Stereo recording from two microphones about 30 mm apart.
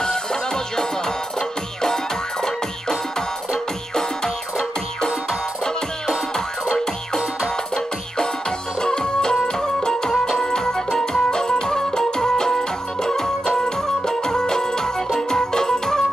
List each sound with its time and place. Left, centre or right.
0.0 s music: centre
2.4 s music: centre
7.7 s music: left